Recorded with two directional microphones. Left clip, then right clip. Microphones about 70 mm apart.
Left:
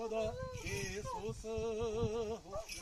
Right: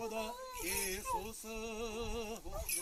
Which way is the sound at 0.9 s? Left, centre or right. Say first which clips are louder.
Right 3 dB; left.